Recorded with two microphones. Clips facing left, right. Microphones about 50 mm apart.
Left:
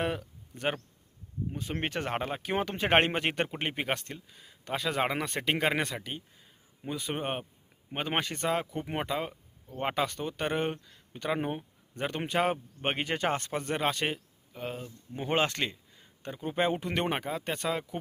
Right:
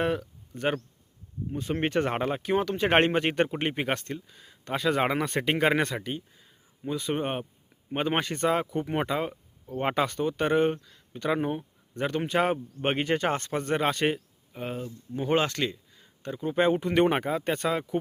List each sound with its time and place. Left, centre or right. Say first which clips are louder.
0.0 s a sound: right 4 dB; centre
1.5 s speech: right 8 dB; centre
14.5 s speech: right 3 dB; centre
15.1 s speech: right 3 dB; centre
16.6 s speech: right 6 dB; centre